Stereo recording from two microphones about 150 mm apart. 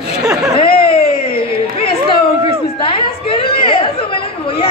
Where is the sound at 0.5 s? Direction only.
40° left (ahead or behind).